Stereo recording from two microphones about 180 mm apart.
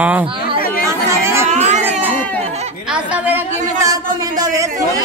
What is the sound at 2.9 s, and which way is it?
A woman's voice, 10° right (ahead or behind).